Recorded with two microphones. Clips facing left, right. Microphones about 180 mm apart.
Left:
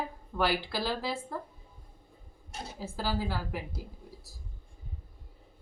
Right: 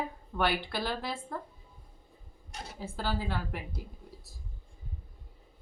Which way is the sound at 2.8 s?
5° left (ahead or behind).